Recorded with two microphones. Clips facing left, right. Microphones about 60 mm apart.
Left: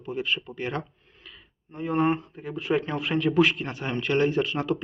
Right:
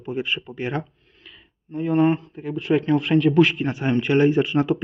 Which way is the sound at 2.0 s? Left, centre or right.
Centre.